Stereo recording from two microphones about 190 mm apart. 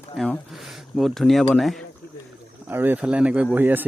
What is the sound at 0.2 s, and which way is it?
Speech, centre (ahead or behind).